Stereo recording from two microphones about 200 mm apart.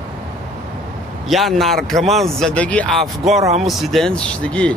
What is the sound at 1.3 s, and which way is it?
Speech, centre (ahead or behind).